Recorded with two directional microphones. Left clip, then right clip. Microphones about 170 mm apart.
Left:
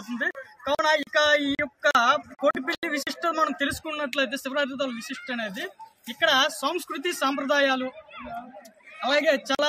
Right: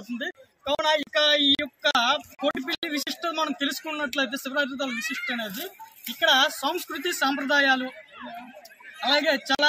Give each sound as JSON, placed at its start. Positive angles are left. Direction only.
{"t": 0.2, "sound": "speech", "side_deg": 0}
{"t": 1.5, "sound": "a sound", "side_deg": 5}
{"t": 3.2, "sound": "speech", "side_deg": 10}
{"t": 4.9, "sound": "speech", "side_deg": 35}
{"t": 5.3, "sound": "speech", "side_deg": 5}
{"t": 9.0, "sound": "speech", "side_deg": 10}